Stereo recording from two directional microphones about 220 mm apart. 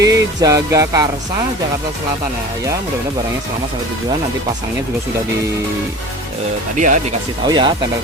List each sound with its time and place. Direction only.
0.0 s music: 15° right (ahead or behind)
6.7 s speech: 35° right (ahead or behind)
7.4 s speech: 20° right (ahead or behind)